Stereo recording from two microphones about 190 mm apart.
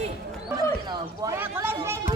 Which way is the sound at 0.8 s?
20° right (ahead or behind).